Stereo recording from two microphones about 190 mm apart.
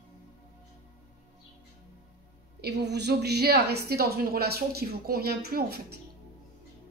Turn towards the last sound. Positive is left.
turn(degrees=-55)  # may be behind; listen again after turning